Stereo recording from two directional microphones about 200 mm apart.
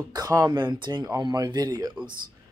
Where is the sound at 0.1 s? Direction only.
20° right (ahead or behind).